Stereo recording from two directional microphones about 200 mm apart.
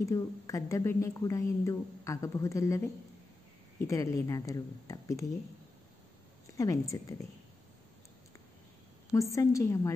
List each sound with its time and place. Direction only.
0.0 s a woman's voice: 15° left (ahead or behind)
6.5 s a woman's voice: 15° left (ahead or behind)
9.1 s a woman's voice: 15° left (ahead or behind)